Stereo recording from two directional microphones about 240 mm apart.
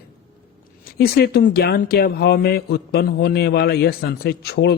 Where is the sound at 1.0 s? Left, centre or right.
Left.